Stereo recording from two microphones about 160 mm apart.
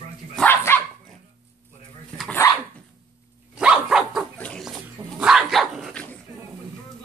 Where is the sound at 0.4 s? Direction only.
10° left (ahead or behind).